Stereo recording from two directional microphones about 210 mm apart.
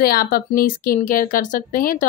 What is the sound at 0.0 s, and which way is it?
Speech, 45° left (ahead or behind).